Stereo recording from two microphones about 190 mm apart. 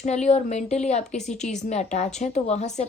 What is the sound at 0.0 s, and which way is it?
Speech, 35° left (ahead or behind).